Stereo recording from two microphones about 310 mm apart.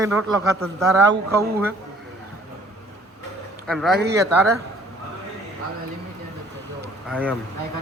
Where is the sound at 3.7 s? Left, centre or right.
Centre.